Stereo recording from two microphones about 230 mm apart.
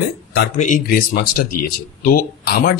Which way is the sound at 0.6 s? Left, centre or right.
Left.